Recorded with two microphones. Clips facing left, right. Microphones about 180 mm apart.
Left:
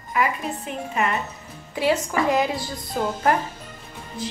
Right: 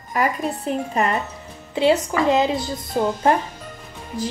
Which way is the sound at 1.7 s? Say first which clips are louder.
Right 4 dB; 25° right (ahead or behind).